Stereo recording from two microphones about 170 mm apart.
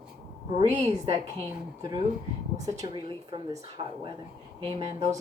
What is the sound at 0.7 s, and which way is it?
Speech, 40° right (ahead or behind).